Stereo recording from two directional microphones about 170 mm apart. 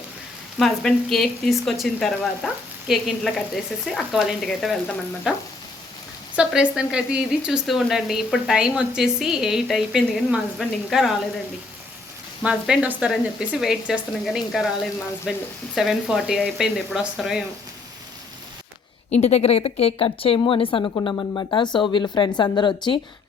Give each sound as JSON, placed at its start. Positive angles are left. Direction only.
{"t": 0.6, "sound": "speech", "side_deg": 5}
{"t": 6.3, "sound": "speech", "side_deg": -5}
{"t": 12.4, "sound": "speech", "side_deg": -5}
{"t": 15.7, "sound": "speech", "side_deg": 0}
{"t": 19.1, "sound": "a woman's voice", "side_deg": 40}